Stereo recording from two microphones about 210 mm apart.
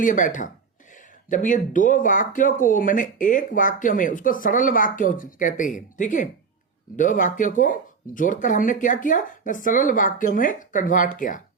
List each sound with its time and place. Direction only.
0.0 s speech: 40° left (ahead or behind)